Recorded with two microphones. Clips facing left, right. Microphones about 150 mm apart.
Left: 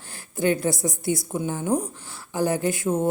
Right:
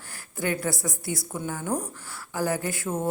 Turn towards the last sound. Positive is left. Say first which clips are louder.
# left 6 dB
turn(degrees=20)  # may be behind; listen again after turning